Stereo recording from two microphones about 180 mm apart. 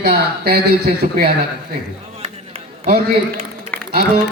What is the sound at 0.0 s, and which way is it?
Speech, 60° right (ahead or behind).